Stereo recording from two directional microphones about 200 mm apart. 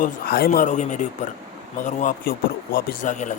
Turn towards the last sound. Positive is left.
turn(degrees=40)  # may be behind; listen again after turning